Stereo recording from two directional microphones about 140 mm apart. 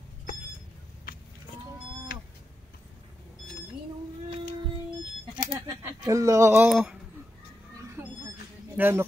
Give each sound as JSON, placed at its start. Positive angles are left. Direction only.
{"t": 5.5, "sound": "speech", "side_deg": -25}
{"t": 6.7, "sound": "speech", "side_deg": -5}
{"t": 8.7, "sound": "speech", "side_deg": -15}